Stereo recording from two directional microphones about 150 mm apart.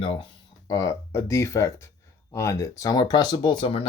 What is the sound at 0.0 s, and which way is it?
Speech, 35° left (ahead or behind).